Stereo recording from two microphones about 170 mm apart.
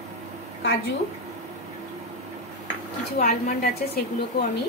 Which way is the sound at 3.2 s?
55° left (ahead or behind).